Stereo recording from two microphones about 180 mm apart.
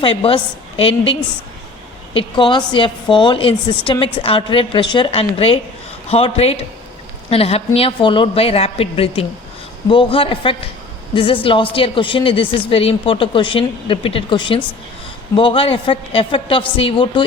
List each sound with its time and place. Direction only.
0.0 s a woman's voice: 30° left (ahead or behind)